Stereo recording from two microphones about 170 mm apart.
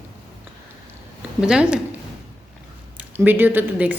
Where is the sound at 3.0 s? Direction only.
10° right (ahead or behind).